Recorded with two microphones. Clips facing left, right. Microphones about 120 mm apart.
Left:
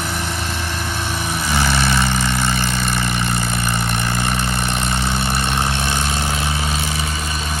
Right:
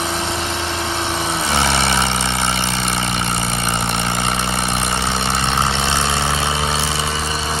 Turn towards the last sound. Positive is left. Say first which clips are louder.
# right 2 dB
turn(degrees=-30)  # may be behind; listen again after turning